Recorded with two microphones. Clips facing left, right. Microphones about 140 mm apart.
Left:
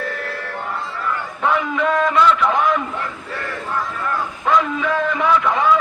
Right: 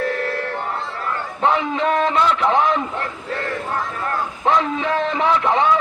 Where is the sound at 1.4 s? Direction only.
25° right (ahead or behind).